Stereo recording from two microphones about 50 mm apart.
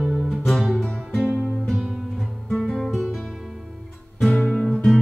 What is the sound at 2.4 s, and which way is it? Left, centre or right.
Guitar, centre.